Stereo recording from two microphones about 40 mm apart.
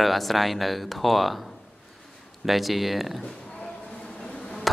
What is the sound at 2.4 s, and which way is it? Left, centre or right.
Speech, centre.